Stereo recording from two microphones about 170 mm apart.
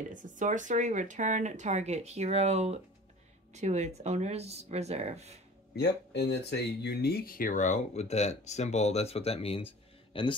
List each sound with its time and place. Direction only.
0.1 s speech: 50° right (ahead or behind)
5.8 s speech: 80° left; by 10.3 s 30° left (ahead or behind)